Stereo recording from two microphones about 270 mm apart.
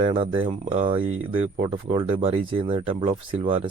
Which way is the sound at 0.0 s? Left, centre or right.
Centre.